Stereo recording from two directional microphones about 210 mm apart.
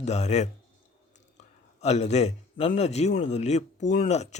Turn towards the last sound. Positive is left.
turn(degrees=35)  # may be behind; listen again after turning